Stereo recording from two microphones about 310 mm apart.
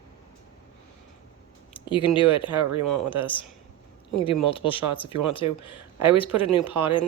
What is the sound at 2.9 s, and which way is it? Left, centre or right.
Speech, centre.